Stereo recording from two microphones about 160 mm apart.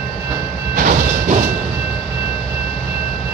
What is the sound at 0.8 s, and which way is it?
Train, 55° right (ahead or behind).